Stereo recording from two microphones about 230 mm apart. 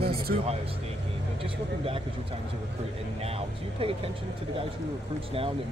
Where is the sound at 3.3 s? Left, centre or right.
Right.